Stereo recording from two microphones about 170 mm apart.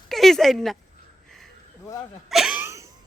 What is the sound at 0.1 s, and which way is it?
Speech, centre (ahead or behind).